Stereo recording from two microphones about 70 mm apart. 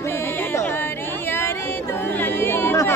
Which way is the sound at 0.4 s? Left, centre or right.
Left.